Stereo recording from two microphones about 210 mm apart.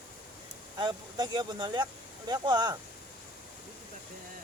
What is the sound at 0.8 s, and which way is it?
Speech, 20° right (ahead or behind).